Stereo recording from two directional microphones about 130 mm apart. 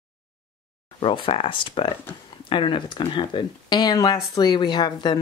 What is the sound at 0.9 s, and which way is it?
Speech, 40° left (ahead or behind).